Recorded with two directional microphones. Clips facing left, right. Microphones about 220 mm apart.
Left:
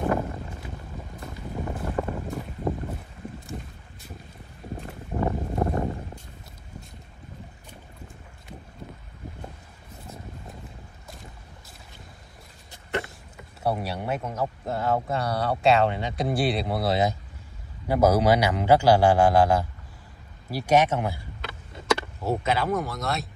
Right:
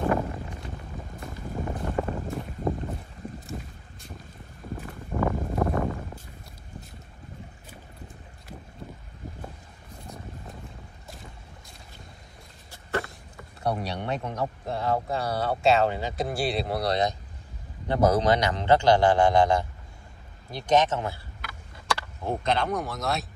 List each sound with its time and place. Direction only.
0.6 s boat: centre (ahead or behind)
4.7 s a sound: 25° left (ahead or behind)
10.0 s boat: centre (ahead or behind)
13.6 s a man's voice: 5° left (ahead or behind)
21.4 s vehicle: 25° left (ahead or behind)
22.2 s speech: 5° left (ahead or behind)